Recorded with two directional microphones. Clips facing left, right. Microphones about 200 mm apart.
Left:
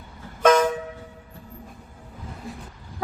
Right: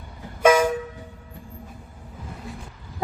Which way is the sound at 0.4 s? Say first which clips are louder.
Even; 10° right (ahead or behind).